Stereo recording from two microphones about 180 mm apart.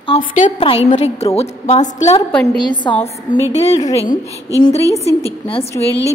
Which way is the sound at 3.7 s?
20° left (ahead or behind).